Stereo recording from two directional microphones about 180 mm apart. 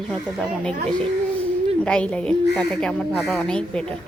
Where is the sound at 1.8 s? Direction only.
5° left (ahead or behind).